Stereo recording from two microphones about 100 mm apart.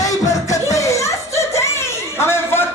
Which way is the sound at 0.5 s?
30° left (ahead or behind).